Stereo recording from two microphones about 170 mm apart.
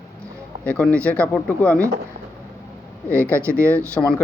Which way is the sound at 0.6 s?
5° left (ahead or behind).